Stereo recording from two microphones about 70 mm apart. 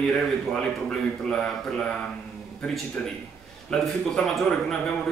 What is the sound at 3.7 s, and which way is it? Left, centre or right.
A man's voice, centre.